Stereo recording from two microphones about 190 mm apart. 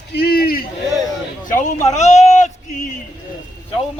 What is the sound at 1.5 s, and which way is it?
Speech, 40° left (ahead or behind).